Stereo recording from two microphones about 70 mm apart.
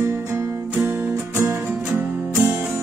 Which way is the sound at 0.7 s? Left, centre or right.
Right.